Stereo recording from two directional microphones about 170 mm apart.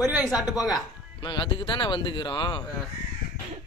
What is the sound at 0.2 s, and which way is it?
Speech, 5° right (ahead or behind).